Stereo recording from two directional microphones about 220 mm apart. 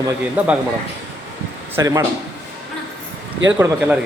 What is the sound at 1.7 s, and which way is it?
Speech, 15° right (ahead or behind).